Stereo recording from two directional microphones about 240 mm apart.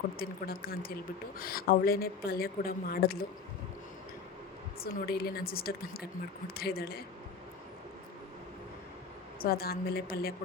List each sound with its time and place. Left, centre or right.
0.2 s speech: left
4.8 s speech: left
9.4 s speech: left